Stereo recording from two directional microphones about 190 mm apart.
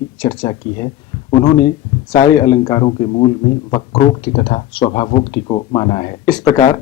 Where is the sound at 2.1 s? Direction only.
20° left (ahead or behind).